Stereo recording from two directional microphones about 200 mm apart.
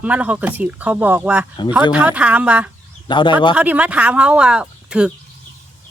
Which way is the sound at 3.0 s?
25° left (ahead or behind).